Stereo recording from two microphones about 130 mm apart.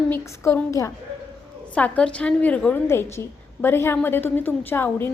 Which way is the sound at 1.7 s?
10° left (ahead or behind).